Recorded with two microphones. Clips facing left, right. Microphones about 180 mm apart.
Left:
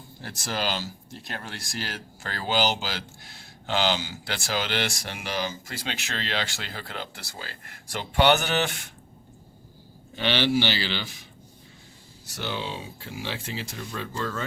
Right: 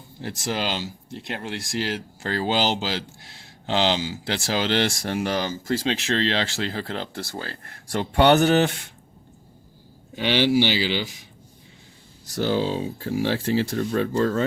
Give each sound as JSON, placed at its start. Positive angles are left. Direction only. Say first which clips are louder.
{"t": 0.2, "sound": "speech", "louder": "right 4 dB", "side_deg": -20}
{"t": 10.2, "sound": "speech", "louder": "right 4 dB", "side_deg": -15}
{"t": 12.4, "sound": "speech", "louder": "right 10 dB", "side_deg": -40}
{"t": 13.5, "sound": "speech", "louder": "right 12 dB", "side_deg": -50}
{"t": 14.2, "sound": "speech", "louder": "right 8 dB", "side_deg": -35}